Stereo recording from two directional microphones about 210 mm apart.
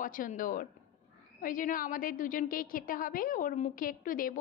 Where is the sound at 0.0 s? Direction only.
40° left (ahead or behind).